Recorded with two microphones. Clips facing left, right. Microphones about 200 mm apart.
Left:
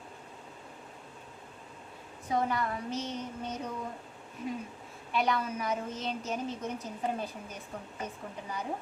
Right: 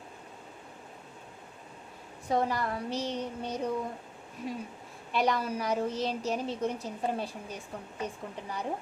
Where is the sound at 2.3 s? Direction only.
35° right (ahead or behind).